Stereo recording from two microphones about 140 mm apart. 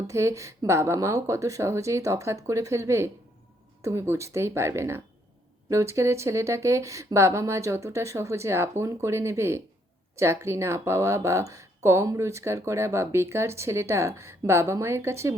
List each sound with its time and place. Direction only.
0.1 s speech: 20° right (ahead or behind)